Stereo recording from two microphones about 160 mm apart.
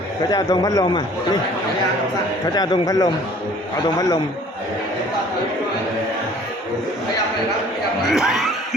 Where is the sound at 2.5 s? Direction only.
25° left (ahead or behind).